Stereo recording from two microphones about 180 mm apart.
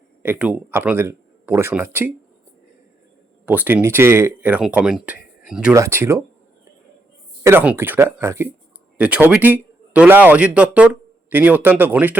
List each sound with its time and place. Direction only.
0.2 s speech: 10° right (ahead or behind)
3.4 s speech: 10° right (ahead or behind)
5.7 s speech: 15° right (ahead or behind)
7.4 s speech: 10° right (ahead or behind)